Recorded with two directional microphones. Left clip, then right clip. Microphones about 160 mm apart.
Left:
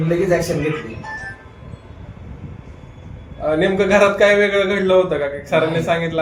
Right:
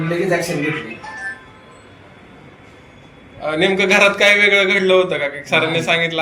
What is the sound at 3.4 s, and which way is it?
A man's voice, 60° left (ahead or behind).